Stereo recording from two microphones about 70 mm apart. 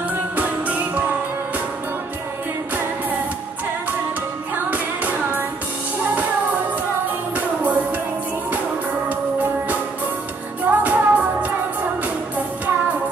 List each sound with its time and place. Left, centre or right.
0.4 s music: right
4.6 s music: right
7.3 s music: right
10.7 s music: right